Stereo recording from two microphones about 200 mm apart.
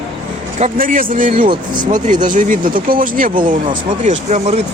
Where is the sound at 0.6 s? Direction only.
40° right (ahead or behind).